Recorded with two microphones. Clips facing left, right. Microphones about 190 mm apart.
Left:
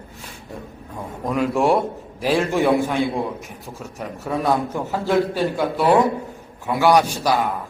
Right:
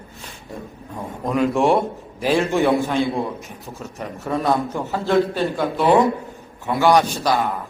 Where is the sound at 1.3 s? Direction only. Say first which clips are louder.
Right 1 dB; 5° left (ahead or behind).